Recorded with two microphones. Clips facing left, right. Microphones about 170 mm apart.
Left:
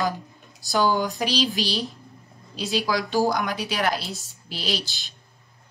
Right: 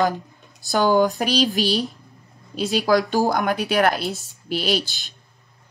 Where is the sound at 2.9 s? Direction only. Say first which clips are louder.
Right 4 dB; 50° right (ahead or behind).